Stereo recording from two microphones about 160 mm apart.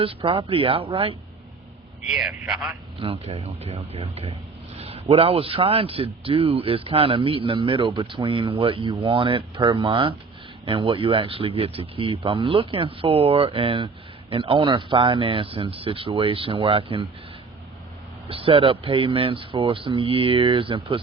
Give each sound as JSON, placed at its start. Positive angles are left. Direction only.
{"t": 0.0, "sound": "speech", "side_deg": -35}
{"t": 2.0, "sound": "a man's voice", "side_deg": 0}
{"t": 3.0, "sound": "speech", "side_deg": -35}
{"t": 18.3, "sound": "speech", "side_deg": -35}